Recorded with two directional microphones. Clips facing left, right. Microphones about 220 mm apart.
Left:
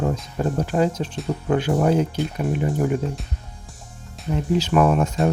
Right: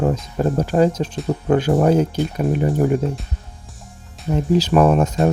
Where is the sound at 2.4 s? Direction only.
Centre (ahead or behind).